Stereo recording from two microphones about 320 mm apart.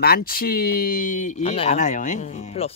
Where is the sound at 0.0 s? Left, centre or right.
Left.